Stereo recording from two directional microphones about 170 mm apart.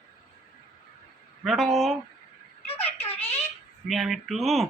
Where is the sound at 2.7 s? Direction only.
35° left (ahead or behind).